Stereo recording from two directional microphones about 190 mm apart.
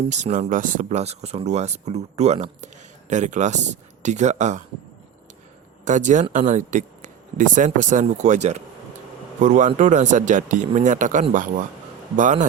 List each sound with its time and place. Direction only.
0.0 s speech: 40° right (ahead or behind)
5.8 s speech: 40° right (ahead or behind)